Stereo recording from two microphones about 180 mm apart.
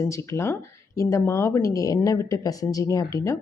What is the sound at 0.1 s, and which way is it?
A woman's voice, 15° left (ahead or behind).